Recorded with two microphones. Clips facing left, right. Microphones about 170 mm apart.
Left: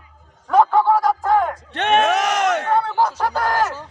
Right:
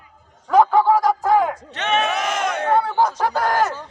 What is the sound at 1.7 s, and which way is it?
Crowd, 55° left (ahead or behind).